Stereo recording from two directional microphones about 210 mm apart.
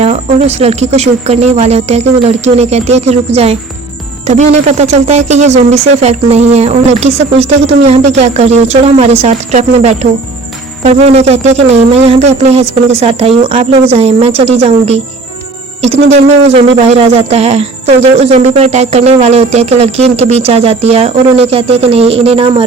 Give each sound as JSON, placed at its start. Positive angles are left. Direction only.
{"t": 0.0, "sound": "speech", "side_deg": -30}
{"t": 11.0, "sound": "music", "side_deg": -30}
{"t": 16.1, "sound": "music", "side_deg": -30}